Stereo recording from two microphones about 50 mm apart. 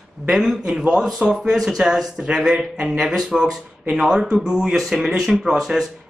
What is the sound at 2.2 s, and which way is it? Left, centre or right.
Speech, right.